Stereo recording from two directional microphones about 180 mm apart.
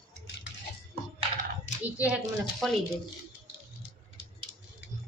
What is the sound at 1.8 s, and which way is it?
Speech, 10° right (ahead or behind).